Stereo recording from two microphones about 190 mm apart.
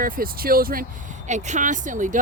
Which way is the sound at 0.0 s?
50° right (ahead or behind).